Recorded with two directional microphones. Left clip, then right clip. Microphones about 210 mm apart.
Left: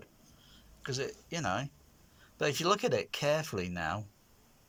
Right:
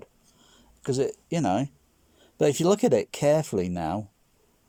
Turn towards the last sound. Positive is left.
turn(degrees=-30)  # may be behind; listen again after turning